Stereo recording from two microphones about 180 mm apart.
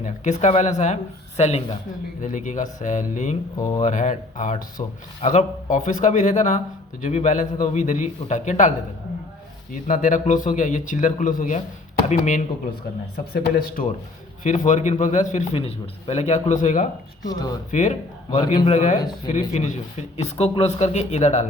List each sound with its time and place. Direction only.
0.0 s a man's voice: 40° left (ahead or behind)
4.8 s a man's voice: 30° left (ahead or behind)
9.8 s a man's voice: 45° left (ahead or behind)
13.3 s speech: 55° left (ahead or behind)
14.4 s a man's voice: 45° left (ahead or behind)
17.2 s speech: 20° left (ahead or behind)
17.7 s a man's voice: 45° left (ahead or behind)